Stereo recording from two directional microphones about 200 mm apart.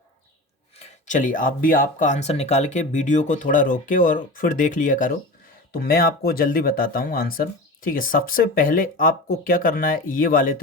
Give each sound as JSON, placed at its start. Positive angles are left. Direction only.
{"t": 0.8, "sound": "speech", "side_deg": 35}